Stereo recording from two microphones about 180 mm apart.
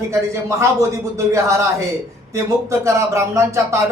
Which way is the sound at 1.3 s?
15° right (ahead or behind).